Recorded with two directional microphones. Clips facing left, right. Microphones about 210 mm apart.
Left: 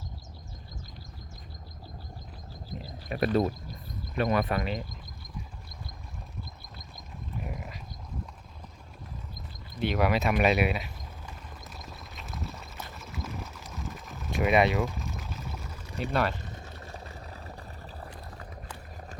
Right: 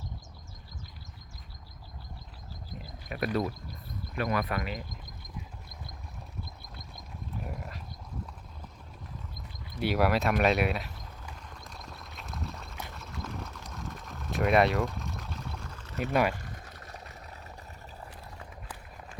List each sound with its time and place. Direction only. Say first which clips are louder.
3.1 s speech: left 4 dB; 30° left (ahead or behind)
7.3 s pig: left 1 dB; 5° left (ahead or behind)
9.7 s speech: even; 5° right (ahead or behind)
11.7 s clip-clop: left 1 dB; centre (ahead or behind)
12.9 s a sound: left 3 dB; centre (ahead or behind)
16.3 s a sound: left 2 dB; 20° left (ahead or behind)